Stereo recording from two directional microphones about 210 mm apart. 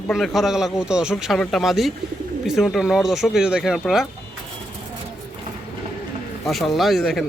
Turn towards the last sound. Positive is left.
turn(degrees=0)  # may be behind; listen again after turning